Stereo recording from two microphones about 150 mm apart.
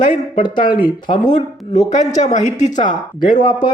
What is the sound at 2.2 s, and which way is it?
Speech, 50° left (ahead or behind).